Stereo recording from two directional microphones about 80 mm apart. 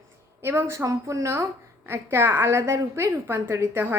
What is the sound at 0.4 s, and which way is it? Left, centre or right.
A woman's voice, right.